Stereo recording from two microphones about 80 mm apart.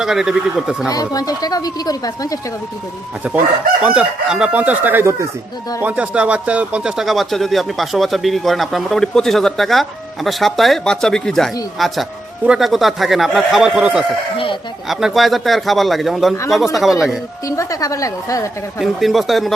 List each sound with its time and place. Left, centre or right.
0.0 s speech: centre
0.9 s speech: left
3.2 s speech: centre
14.3 s speech: left
14.8 s speech: centre
17.6 s speech: left
18.8 s speech: centre